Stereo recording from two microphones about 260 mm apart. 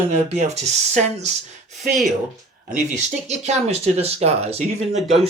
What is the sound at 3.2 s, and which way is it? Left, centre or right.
Speech, right.